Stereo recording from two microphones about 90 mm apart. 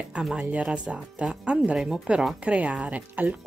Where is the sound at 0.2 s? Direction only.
5° right (ahead or behind).